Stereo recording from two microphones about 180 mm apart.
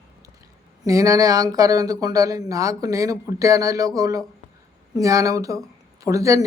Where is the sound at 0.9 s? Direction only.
20° right (ahead or behind).